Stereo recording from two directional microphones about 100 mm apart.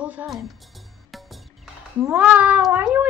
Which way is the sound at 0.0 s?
15° right (ahead or behind).